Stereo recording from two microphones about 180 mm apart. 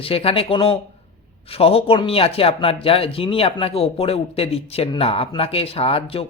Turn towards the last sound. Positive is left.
turn(degrees=30)  # may be behind; listen again after turning